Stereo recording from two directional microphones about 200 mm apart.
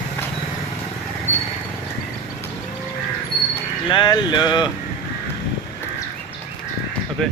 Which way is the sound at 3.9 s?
20° left (ahead or behind).